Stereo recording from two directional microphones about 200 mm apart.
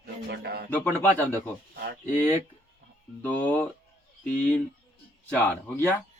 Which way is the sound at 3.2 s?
10° left (ahead or behind).